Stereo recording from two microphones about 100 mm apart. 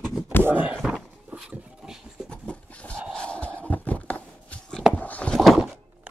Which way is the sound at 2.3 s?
10° left (ahead or behind).